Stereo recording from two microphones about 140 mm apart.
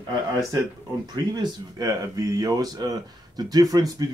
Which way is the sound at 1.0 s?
30° right (ahead or behind).